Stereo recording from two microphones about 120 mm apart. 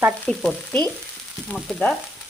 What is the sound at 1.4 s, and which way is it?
Frying, 5° left (ahead or behind).